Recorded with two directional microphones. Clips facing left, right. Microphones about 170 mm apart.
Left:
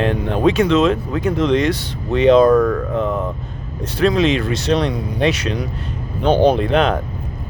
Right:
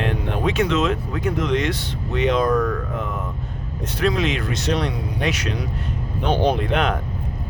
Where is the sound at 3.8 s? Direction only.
30° left (ahead or behind).